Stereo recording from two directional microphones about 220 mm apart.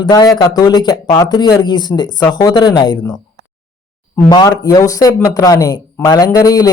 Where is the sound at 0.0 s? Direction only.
20° left (ahead or behind).